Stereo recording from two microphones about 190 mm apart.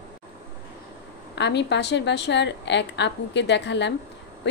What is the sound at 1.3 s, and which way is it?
A woman's voice, 65° left (ahead or behind).